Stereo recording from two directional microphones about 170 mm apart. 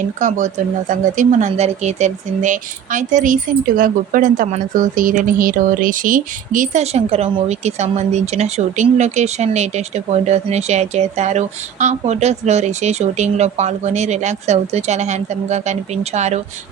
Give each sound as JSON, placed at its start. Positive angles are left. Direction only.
{"t": 0.2, "sound": "speech", "side_deg": -45}